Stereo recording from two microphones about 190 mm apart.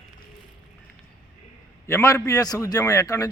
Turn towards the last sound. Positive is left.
turn(degrees=15)  # may be behind; listen again after turning